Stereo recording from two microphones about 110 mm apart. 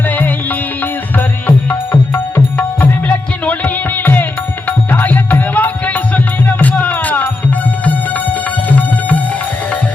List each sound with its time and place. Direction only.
0.0 s music: 15° left (ahead or behind)